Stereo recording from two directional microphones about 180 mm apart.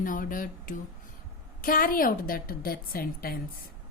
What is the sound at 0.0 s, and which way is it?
A woman's voice, 50° left (ahead or behind).